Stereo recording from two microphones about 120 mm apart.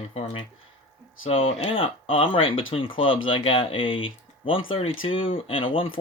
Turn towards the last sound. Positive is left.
turn(degrees=50)  # may be behind; listen again after turning